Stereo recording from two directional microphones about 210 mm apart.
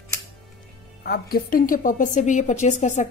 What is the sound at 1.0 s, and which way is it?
A woman's voice, 45° left (ahead or behind).